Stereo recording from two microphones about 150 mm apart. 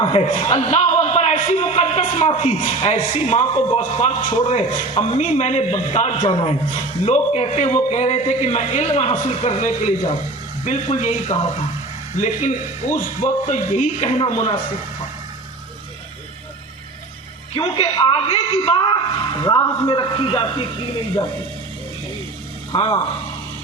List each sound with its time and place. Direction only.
0.0 s speech: 40° left (ahead or behind)
0.3 s a man's voice: 50° left (ahead or behind)
2.6 s a man's voice: 55° left (ahead or behind)
17.5 s speech: 40° left (ahead or behind)
22.7 s speech: 35° left (ahead or behind)